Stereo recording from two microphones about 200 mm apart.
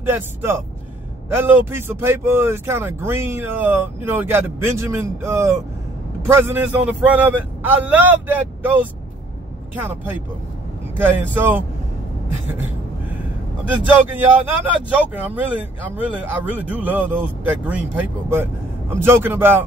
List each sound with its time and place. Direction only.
0.0 s speech: 10° right (ahead or behind)
13.8 s speech: 10° right (ahead or behind)